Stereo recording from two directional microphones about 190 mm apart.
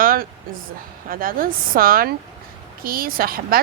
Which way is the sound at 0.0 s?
50° right (ahead or behind).